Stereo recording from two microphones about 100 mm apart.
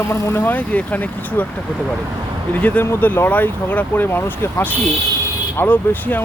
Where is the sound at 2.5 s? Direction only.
15° left (ahead or behind).